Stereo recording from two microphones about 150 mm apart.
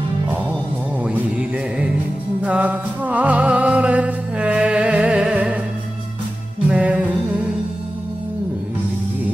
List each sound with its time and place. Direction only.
1.0 s music: 5° right (ahead or behind)
6.7 s music: 10° right (ahead or behind)